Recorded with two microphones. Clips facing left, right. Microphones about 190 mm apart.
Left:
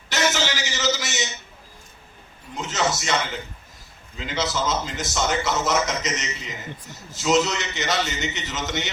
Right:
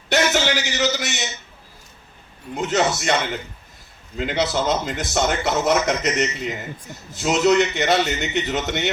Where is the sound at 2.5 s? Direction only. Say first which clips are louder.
Right 5 dB; 55° right (ahead or behind).